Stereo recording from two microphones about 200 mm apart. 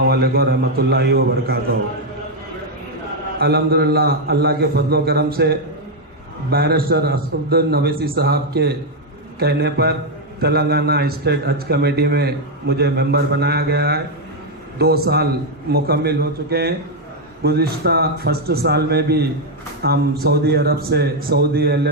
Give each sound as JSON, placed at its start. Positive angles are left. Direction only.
{"t": 0.0, "sound": "a man's voice", "side_deg": -50}
{"t": 3.3, "sound": "a man's voice", "side_deg": -50}